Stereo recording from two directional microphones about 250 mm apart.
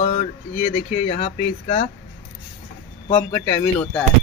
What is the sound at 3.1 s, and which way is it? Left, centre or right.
Speech, centre.